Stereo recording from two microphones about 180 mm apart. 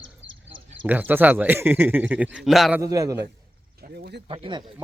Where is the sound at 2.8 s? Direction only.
20° right (ahead or behind).